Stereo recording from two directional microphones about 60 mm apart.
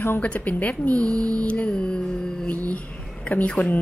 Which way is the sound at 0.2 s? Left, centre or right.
Left.